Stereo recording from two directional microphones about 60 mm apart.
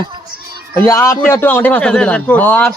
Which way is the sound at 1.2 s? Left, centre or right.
Left.